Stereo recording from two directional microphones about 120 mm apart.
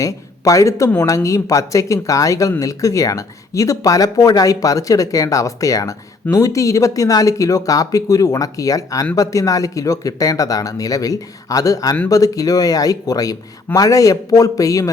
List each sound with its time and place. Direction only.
0.0 s speech: 25° left (ahead or behind)